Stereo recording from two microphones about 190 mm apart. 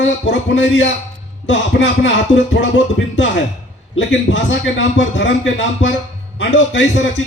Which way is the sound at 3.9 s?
75° left (ahead or behind).